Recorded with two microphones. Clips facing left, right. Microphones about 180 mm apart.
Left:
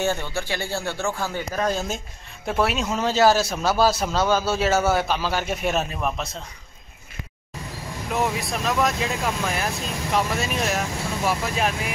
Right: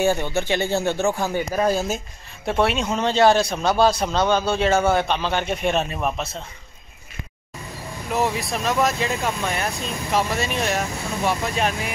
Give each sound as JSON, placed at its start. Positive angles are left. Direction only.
{"t": 0.0, "sound": "speech", "side_deg": -15}
{"t": 8.1, "sound": "speech", "side_deg": 0}